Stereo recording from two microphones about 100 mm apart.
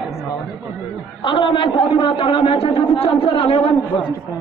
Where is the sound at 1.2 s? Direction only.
55° left (ahead or behind).